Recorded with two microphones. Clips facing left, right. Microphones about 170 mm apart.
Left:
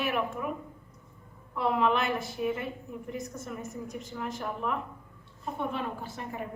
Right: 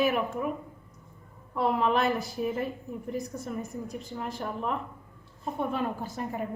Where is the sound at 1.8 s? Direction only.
35° right (ahead or behind).